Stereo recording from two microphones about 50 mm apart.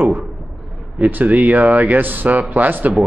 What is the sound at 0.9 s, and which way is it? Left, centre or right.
Speech, right.